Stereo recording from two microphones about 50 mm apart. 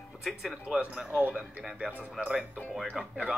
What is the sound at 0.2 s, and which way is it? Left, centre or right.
Speech, centre.